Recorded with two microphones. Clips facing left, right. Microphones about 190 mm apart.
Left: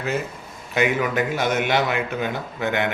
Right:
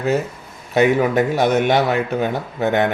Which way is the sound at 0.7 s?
35° right (ahead or behind).